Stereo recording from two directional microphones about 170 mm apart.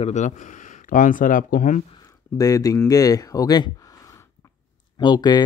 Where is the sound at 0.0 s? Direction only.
45° left (ahead or behind).